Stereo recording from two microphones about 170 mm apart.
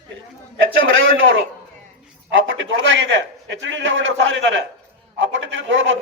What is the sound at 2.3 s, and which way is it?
A man's voice, 90° right.